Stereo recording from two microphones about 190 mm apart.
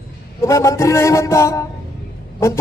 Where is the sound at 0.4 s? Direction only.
15° left (ahead or behind).